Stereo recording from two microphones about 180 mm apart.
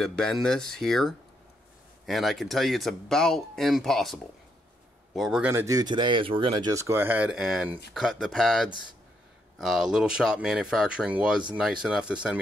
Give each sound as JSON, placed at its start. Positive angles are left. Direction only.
{"t": 0.0, "sound": "speech", "side_deg": 5}
{"t": 5.5, "sound": "speech", "side_deg": -15}
{"t": 6.7, "sound": "speech", "side_deg": -15}